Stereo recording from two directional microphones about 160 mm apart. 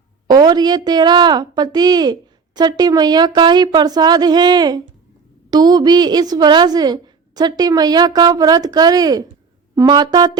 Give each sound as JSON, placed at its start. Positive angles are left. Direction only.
{"t": 0.3, "sound": "a woman's voice", "side_deg": -25}